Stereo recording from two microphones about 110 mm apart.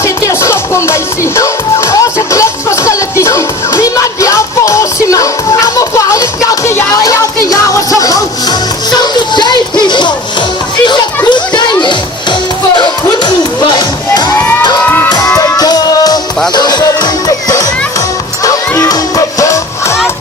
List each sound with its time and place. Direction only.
0.0 s music: 25° left (ahead or behind)
9.0 s music: 40° left (ahead or behind)
11.3 s music: 45° left (ahead or behind)
15.4 s music: 35° left (ahead or behind)
18.8 s music: 30° left (ahead or behind)